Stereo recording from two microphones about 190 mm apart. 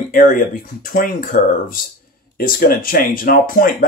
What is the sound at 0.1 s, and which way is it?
Speech, 45° left (ahead or behind).